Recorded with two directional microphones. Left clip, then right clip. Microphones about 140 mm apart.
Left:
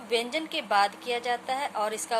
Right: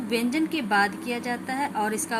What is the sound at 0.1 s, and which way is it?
A woman's voice, 30° left (ahead or behind).